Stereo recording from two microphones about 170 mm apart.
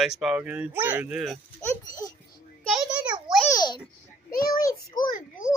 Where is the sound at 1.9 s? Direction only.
20° left (ahead or behind).